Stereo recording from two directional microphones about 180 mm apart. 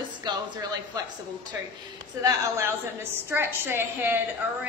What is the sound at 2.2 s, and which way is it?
A woman's voice, 15° right (ahead or behind).